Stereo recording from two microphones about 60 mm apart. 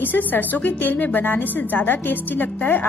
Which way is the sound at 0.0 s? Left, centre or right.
Left.